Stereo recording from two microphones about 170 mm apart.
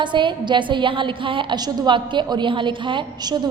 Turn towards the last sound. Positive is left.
turn(degrees=-25)  # may be behind; listen again after turning